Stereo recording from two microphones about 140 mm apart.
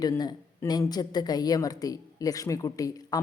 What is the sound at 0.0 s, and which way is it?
Speech, 30° left (ahead or behind).